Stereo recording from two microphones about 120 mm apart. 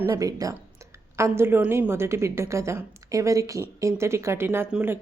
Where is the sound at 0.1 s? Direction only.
30° right (ahead or behind).